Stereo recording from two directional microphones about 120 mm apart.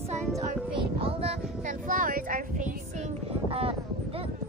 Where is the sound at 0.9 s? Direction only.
55° right (ahead or behind).